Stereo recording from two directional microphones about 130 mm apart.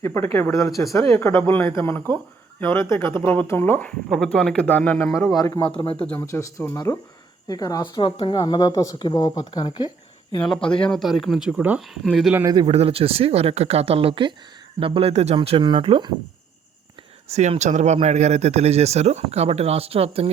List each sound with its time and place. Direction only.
0.0 s speech: 20° left (ahead or behind)
5.1 s speech: centre (ahead or behind)
5.4 s speech: 25° left (ahead or behind)
6.0 s speech: 10° left (ahead or behind)
6.2 s speech: 20° left (ahead or behind)
10.4 s speech: 5° left (ahead or behind)
12.6 s speech: 50° right (ahead or behind)
15.4 s speech: 40° right (ahead or behind)
17.2 s speech: 60° right (ahead or behind)